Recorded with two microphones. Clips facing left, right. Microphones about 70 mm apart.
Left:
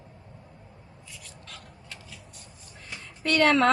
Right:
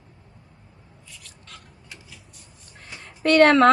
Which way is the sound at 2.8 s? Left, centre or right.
Right.